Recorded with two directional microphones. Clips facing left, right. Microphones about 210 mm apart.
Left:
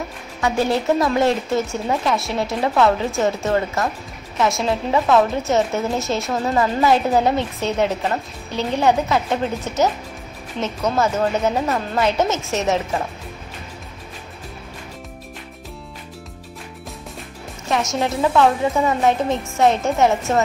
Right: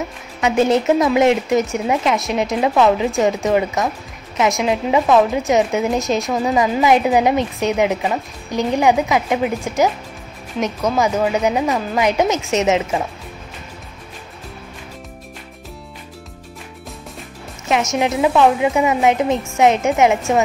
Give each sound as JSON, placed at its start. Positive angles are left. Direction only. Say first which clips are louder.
{"t": 0.4, "sound": "a woman's voice", "louder": "right 4 dB", "side_deg": -20}
{"t": 17.9, "sound": "a woman's voice", "louder": "right 2 dB", "side_deg": -15}